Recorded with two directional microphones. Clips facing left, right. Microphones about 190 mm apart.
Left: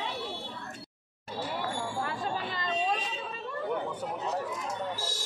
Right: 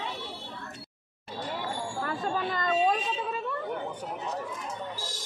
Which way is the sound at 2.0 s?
45° right (ahead or behind).